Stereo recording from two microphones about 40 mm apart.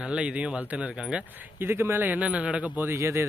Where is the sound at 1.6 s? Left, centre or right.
Right.